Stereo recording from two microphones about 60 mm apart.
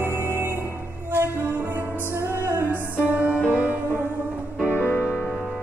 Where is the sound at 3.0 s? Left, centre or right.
Right.